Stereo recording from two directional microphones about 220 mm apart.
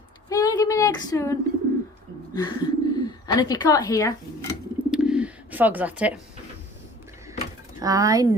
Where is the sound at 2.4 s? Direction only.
20° left (ahead or behind).